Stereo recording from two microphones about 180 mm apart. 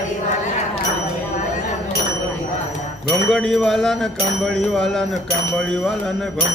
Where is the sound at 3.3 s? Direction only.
5° left (ahead or behind).